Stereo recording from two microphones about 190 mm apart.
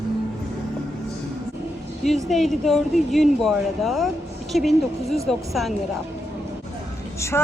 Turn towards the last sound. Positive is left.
turn(degrees=15)  # may be behind; listen again after turning